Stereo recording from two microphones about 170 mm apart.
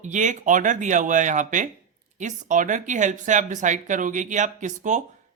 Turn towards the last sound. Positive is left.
turn(degrees=-45)  # may be behind; listen again after turning